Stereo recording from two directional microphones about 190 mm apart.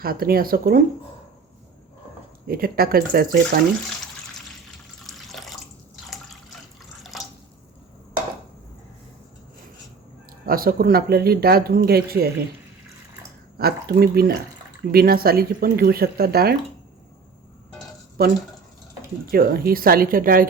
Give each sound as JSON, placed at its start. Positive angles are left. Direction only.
{"t": 0.0, "sound": "speech", "side_deg": -50}
{"t": 2.5, "sound": "speech", "side_deg": -50}
{"t": 5.0, "sound": "water", "side_deg": 0}
{"t": 7.1, "sound": "drip", "side_deg": 0}
{"t": 10.4, "sound": "speech", "side_deg": -50}
{"t": 13.6, "sound": "speech", "side_deg": -55}
{"t": 19.3, "sound": "speech", "side_deg": -55}